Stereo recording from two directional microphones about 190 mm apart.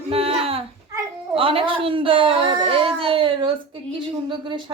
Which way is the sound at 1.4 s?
30° right (ahead or behind).